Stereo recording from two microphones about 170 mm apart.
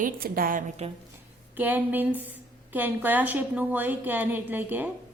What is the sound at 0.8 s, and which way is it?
Speech, 40° right (ahead or behind).